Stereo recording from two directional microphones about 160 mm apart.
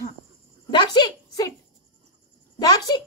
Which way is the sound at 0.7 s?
25° left (ahead or behind).